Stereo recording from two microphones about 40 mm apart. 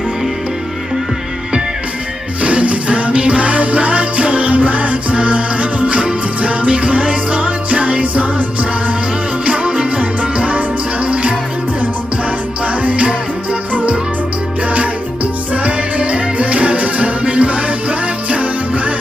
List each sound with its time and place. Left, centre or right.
2.4 s music: right
12.6 s music: right
14.7 s music: right